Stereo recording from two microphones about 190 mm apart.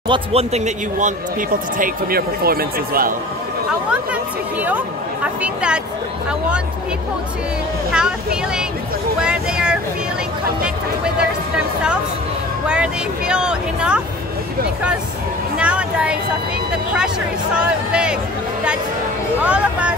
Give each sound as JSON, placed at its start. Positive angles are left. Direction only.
{"t": 0.1, "sound": "speech", "side_deg": -30}
{"t": 1.8, "sound": "speech", "side_deg": -50}
{"t": 4.6, "sound": "speech", "side_deg": -5}
{"t": 7.9, "sound": "speech", "side_deg": -5}
{"t": 9.2, "sound": "vehicle", "side_deg": -5}
{"t": 11.1, "sound": "music", "side_deg": -5}
{"t": 12.6, "sound": "speech", "side_deg": -5}
{"t": 15.5, "sound": "a sound", "side_deg": -5}
{"t": 17.6, "sound": "speech", "side_deg": -5}
{"t": 19.4, "sound": "speech", "side_deg": -5}